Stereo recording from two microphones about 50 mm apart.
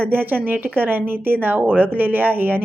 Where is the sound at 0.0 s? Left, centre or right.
Right.